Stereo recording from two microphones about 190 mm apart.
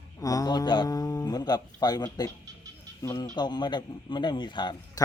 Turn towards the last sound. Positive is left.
turn(degrees=20)  # may be behind; listen again after turning